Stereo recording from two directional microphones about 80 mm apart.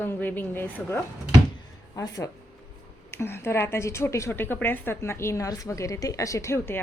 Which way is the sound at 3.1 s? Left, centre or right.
Left.